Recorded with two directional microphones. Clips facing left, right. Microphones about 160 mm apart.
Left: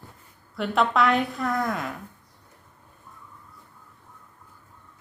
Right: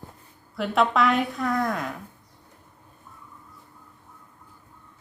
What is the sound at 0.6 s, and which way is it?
A woman's voice, centre (ahead or behind).